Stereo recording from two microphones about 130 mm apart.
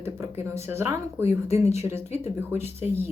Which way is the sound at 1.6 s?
55° left (ahead or behind).